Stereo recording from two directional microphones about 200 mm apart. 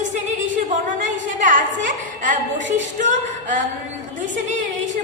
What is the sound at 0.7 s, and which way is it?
A woman's voice, 40° right (ahead or behind).